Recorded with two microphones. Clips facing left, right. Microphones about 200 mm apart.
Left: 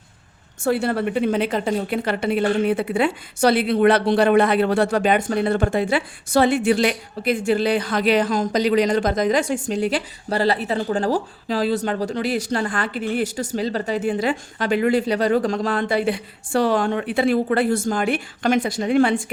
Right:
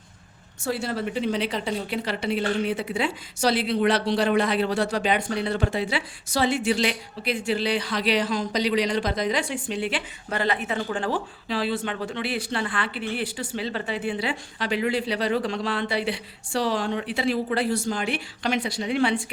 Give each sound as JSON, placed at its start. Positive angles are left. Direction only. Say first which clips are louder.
{"t": 0.6, "sound": "a woman's voice", "louder": "left 7 dB", "side_deg": 60}